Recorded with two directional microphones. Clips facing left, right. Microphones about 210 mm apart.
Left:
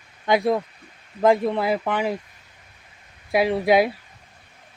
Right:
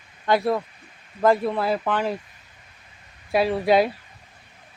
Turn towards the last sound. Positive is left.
turn(degrees=10)  # may be behind; listen again after turning